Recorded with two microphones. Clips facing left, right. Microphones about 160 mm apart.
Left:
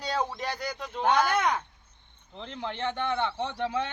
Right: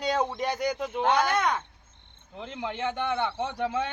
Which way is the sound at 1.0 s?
5° left (ahead or behind).